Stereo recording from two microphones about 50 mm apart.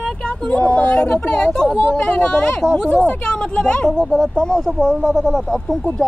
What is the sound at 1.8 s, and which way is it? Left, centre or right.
Speech, left.